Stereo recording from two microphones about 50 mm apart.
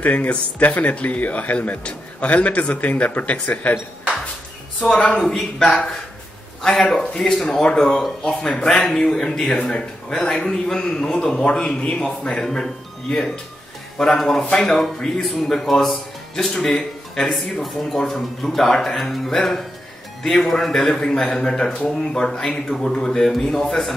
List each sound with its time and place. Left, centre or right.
0.0 s speech: left
4.9 s speech: left
5.2 s speech: centre
5.7 s a man's voice: left
10.2 s a man's voice: centre
12.4 s a man's voice: centre
13.9 s a man's voice: centre